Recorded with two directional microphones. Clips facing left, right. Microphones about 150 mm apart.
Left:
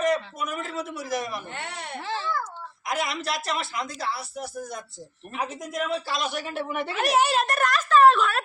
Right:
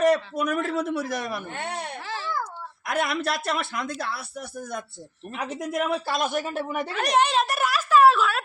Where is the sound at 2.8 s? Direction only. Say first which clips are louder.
Right 3 dB; 60° right (ahead or behind); by 6.8 s 45° right (ahead or behind).